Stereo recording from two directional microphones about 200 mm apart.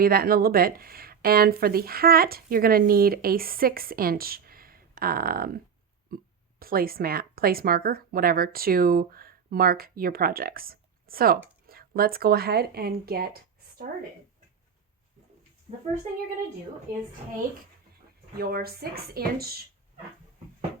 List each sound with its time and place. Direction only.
0.0 s speech: 50° right (ahead or behind)
15.7 s a child's voice: 30° right (ahead or behind)
18.3 s speech: 50° right (ahead or behind)